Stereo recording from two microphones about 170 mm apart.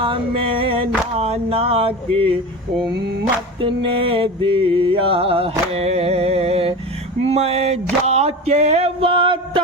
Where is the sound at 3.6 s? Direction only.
30° right (ahead or behind).